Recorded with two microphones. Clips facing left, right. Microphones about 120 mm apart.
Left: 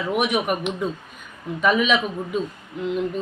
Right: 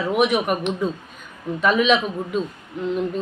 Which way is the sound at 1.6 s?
5° left (ahead or behind).